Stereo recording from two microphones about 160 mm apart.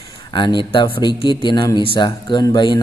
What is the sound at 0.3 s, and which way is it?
A man's voice, 30° left (ahead or behind).